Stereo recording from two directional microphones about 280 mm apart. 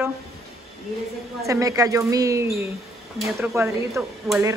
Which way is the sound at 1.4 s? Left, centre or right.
Centre.